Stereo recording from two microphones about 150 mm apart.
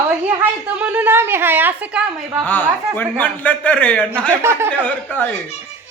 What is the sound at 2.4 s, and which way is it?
A man's voice, 10° left (ahead or behind).